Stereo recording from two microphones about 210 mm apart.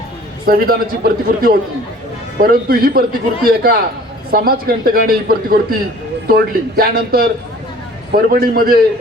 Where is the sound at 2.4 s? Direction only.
45° right (ahead or behind).